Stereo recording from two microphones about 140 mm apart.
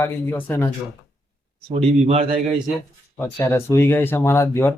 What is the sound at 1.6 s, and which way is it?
Speech, 50° right (ahead or behind).